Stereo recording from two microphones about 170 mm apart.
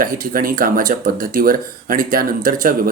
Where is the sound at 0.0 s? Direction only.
55° right (ahead or behind).